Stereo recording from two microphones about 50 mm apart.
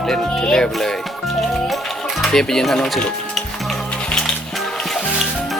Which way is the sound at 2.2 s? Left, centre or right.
Centre.